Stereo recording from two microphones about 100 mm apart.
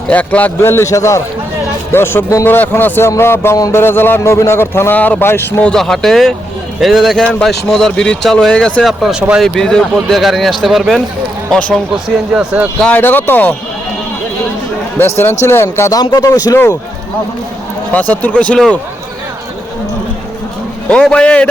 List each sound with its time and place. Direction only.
0.1 s a man's voice: 15° left (ahead or behind)
5.6 s speech: 5° left (ahead or behind)
8.8 s speech: centre (ahead or behind)
12.0 s speech: 10° right (ahead or behind)
12.9 s a man's voice: 20° left (ahead or behind)
14.9 s a man's voice: 25° left (ahead or behind)
16.0 s speech: 40° left (ahead or behind)
17.9 s speech: 15° left (ahead or behind)
20.9 s speech: 10° left (ahead or behind)